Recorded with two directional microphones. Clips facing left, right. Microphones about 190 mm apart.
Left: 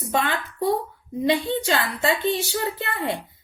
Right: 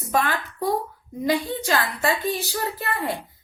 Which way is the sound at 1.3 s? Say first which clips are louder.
Left 1 dB; 25° left (ahead or behind).